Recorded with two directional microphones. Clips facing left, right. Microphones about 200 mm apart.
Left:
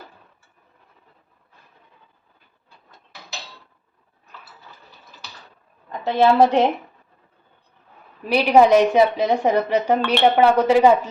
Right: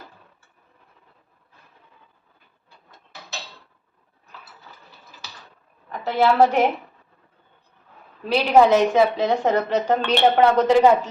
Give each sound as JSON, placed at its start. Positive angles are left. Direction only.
{"t": 6.1, "sound": "a woman's voice", "side_deg": 15}
{"t": 8.3, "sound": "a woman's voice", "side_deg": 15}